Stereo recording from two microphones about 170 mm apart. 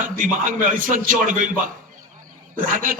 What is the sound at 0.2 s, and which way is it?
A man's voice, 50° right (ahead or behind).